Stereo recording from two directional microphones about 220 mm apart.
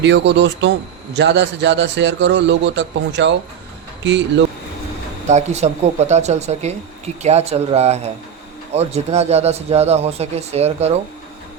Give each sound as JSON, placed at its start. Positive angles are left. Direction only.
{"t": 0.0, "sound": "a man's voice", "side_deg": -55}
{"t": 5.3, "sound": "speech", "side_deg": -30}